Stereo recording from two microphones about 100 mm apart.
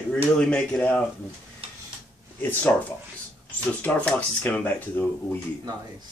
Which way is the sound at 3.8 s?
15° left (ahead or behind).